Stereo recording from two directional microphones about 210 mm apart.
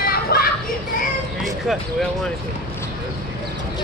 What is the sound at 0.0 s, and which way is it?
Children playing, 45° left (ahead or behind).